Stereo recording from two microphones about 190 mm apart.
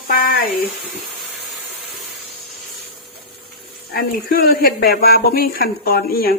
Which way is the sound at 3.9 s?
50° left (ahead or behind).